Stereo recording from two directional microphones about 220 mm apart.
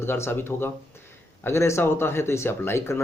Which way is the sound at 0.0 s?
10° left (ahead or behind).